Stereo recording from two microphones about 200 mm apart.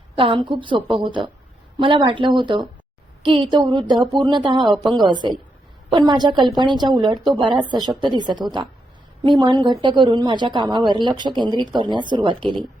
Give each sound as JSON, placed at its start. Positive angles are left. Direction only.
{"t": 0.2, "sound": "a woman's voice", "side_deg": -25}